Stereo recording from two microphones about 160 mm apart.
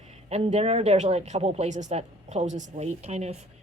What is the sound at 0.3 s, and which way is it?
Speech, 40° right (ahead or behind).